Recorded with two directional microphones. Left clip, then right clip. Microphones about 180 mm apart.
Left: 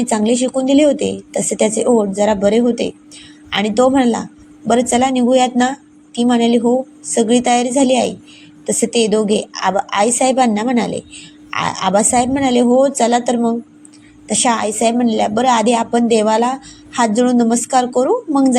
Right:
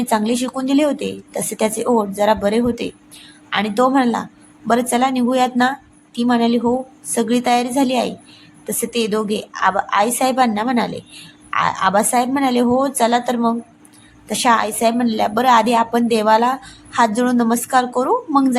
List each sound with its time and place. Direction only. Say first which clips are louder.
0.0 s a woman's voice: left 3 dB; 5° left (ahead or behind)